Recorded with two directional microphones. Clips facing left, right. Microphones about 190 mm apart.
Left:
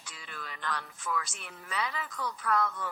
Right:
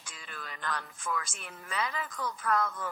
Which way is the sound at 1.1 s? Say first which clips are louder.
Left 1 dB; 45° right (ahead or behind).